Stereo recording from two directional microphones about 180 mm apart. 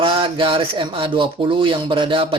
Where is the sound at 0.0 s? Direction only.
30° right (ahead or behind).